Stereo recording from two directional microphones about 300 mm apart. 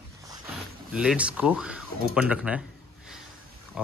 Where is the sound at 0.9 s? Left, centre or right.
Centre.